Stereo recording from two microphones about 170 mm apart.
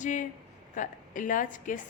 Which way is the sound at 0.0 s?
45° left (ahead or behind).